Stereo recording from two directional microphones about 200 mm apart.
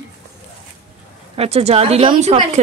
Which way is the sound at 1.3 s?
30° right (ahead or behind).